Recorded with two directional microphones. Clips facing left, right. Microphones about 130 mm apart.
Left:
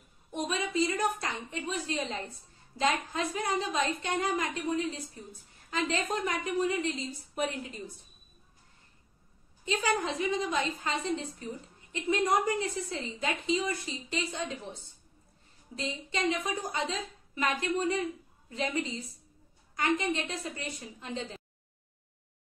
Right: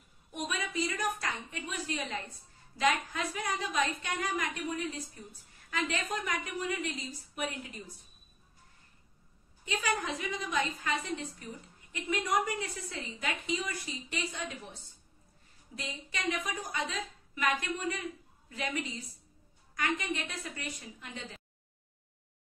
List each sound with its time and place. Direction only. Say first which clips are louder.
0.3 s a woman's voice: left 5 dB; 30° left (ahead or behind)
7.3 s a woman's voice: left 5 dB; 30° left (ahead or behind)
9.7 s a woman's voice: left 4 dB; 25° left (ahead or behind)